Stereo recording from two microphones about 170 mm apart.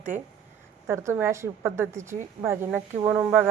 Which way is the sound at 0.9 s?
15° right (ahead or behind).